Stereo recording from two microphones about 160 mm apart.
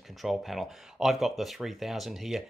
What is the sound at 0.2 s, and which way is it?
Speech, centre (ahead or behind).